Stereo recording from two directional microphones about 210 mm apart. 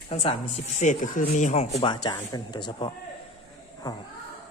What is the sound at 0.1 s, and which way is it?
Speech, 30° left (ahead or behind).